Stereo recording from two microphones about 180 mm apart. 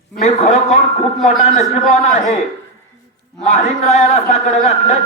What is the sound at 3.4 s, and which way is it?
A man's voice, 40° left (ahead or behind).